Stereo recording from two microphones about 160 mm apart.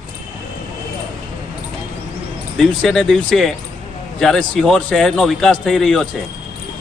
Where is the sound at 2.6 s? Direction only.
Centre (ahead or behind).